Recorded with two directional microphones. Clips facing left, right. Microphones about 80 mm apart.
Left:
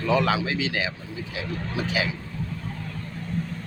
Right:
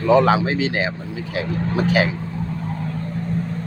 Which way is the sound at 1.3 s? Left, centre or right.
Right.